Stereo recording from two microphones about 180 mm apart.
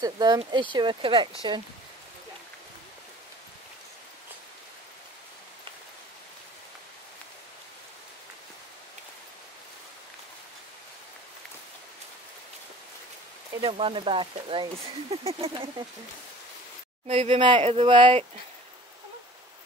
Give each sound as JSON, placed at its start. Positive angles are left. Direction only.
{"t": 0.0, "sound": "speech", "side_deg": -20}
{"t": 13.6, "sound": "speech", "side_deg": -30}
{"t": 17.1, "sound": "speech", "side_deg": -35}